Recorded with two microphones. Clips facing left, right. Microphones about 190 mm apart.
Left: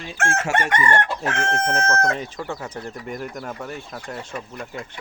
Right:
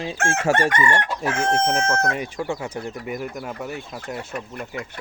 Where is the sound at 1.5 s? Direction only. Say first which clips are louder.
Right 2 dB; 10° right (ahead or behind).